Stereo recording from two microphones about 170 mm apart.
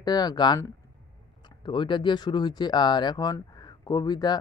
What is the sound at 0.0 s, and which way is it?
Speech, 25° left (ahead or behind).